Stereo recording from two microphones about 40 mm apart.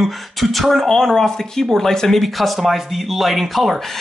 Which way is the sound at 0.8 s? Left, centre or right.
Centre.